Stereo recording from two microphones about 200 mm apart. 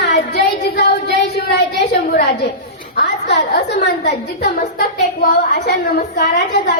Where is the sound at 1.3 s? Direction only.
55° left (ahead or behind).